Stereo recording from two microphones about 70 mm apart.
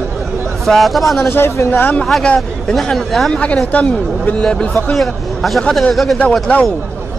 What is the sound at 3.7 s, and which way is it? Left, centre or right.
A man's voice, left.